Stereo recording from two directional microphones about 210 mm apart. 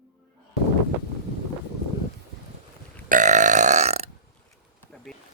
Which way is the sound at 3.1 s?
35° right (ahead or behind).